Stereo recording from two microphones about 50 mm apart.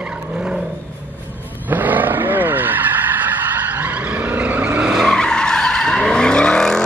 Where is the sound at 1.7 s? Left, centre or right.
Right.